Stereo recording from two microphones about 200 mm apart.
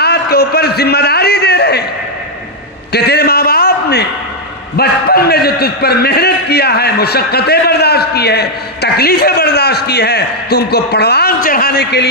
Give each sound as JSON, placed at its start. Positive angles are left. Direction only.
{"t": 0.0, "sound": "a man's voice", "side_deg": 55}
{"t": 2.9, "sound": "a man's voice", "side_deg": 55}